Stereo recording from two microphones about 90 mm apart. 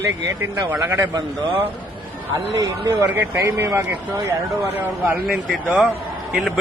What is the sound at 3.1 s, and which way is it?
Speech, 25° right (ahead or behind).